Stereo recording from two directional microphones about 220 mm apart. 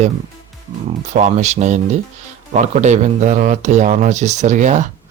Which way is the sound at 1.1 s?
30° right (ahead or behind).